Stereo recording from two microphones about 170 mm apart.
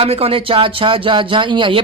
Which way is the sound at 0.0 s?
35° right (ahead or behind).